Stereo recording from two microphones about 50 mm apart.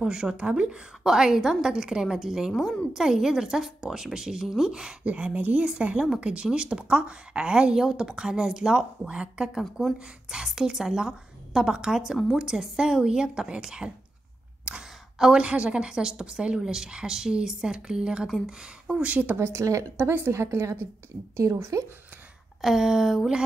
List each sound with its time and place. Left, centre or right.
0.0 s a woman's voice: centre
5.0 s a woman's voice: right
9.6 s speech: centre
9.9 s a woman's voice: centre
14.6 s sigh: centre
15.1 s a woman's voice: centre
15.4 s a woman's voice: right
18.9 s speech: right
19.3 s speech: right
19.6 s a woman's voice: right
20.0 s a woman's voice: right
21.4 s a woman's voice: right
22.6 s a woman's voice: centre